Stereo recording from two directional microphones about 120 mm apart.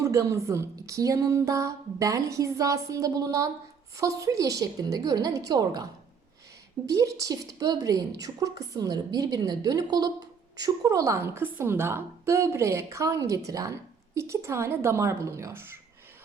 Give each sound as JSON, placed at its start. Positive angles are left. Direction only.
{"t": 0.0, "sound": "a woman's voice", "side_deg": -25}
{"t": 6.8, "sound": "a woman's voice", "side_deg": -25}